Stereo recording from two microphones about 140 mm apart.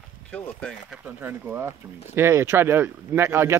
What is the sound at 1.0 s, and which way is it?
Speech, 15° right (ahead or behind).